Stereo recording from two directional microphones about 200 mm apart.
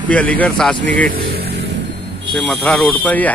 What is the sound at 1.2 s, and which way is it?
Vehicle, 55° right (ahead or behind).